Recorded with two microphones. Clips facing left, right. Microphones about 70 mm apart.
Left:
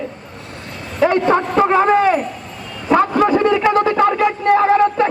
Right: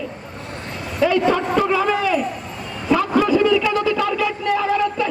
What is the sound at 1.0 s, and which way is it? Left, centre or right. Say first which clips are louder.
Speech: left 3 dB; left.